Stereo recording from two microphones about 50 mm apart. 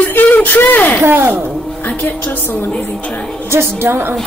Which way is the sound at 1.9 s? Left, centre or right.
Left.